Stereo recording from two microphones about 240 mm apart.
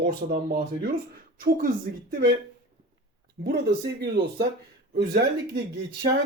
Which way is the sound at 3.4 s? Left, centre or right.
Right.